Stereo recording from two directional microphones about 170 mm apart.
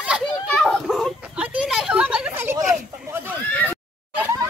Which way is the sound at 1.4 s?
5° right (ahead or behind).